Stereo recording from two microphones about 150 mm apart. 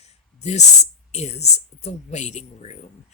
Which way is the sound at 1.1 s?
45° left (ahead or behind).